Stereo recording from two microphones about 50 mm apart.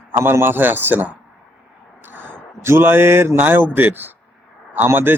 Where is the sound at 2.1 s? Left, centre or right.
Right.